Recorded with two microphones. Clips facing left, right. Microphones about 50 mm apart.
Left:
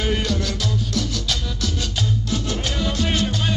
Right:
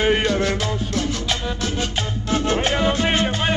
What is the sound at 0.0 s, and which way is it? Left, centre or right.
Music, right.